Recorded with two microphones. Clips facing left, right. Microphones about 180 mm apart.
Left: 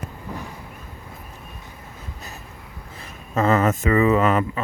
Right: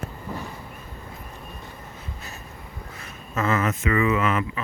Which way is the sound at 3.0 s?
35° left (ahead or behind).